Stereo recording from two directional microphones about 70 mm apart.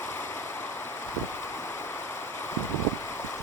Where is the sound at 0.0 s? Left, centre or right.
Left.